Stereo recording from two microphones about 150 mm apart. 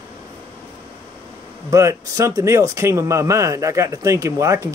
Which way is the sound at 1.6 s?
20° right (ahead or behind).